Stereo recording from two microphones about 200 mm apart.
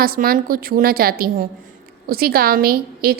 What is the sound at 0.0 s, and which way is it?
A woman's voice, 45° right (ahead or behind).